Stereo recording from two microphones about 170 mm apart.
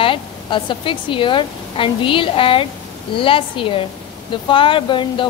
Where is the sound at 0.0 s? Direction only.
30° left (ahead or behind).